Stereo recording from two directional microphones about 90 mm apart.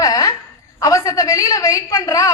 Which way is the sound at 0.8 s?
40° left (ahead or behind).